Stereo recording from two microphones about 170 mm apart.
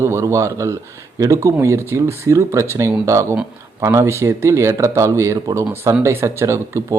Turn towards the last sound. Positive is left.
turn(degrees=-15)  # may be behind; listen again after turning